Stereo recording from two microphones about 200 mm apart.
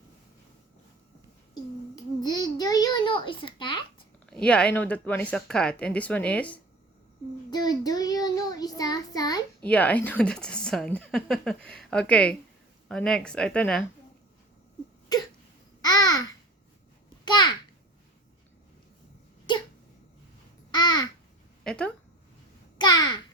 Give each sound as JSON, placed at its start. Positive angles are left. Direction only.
{"t": 1.5, "sound": "a sound", "side_deg": 20}
{"t": 4.3, "sound": "speech", "side_deg": 5}
{"t": 7.5, "sound": "child singing", "side_deg": 20}
{"t": 9.6, "sound": "speech", "side_deg": 5}
{"t": 15.8, "sound": "babbling", "side_deg": 20}
{"t": 17.2, "sound": "a sound", "side_deg": 20}
{"t": 20.7, "sound": "babbling", "side_deg": 20}
{"t": 21.6, "sound": "speech", "side_deg": 5}
{"t": 22.8, "sound": "babbling", "side_deg": 20}